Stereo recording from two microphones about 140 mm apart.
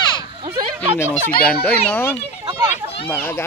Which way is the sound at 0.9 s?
15° left (ahead or behind).